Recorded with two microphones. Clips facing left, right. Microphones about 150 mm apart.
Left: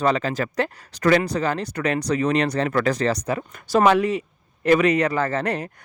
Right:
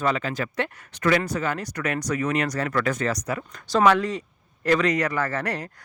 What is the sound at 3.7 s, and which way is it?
A man's voice, 15° left (ahead or behind).